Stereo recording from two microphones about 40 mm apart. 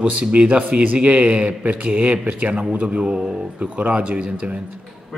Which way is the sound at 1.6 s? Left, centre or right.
Right.